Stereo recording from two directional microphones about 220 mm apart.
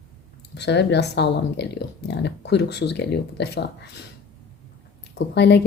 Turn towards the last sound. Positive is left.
turn(degrees=50)  # may be behind; listen again after turning